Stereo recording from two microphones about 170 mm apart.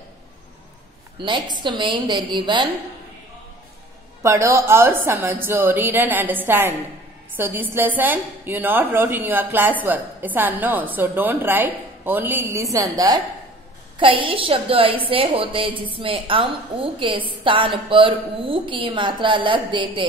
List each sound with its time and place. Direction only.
1.2 s a woman's voice: 25° right (ahead or behind)
4.2 s a woman's voice: 15° right (ahead or behind)